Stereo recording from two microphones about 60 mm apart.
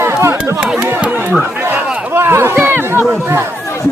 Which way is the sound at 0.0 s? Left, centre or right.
Right.